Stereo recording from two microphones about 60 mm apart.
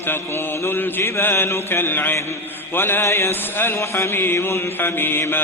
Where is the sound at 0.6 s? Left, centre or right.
Left.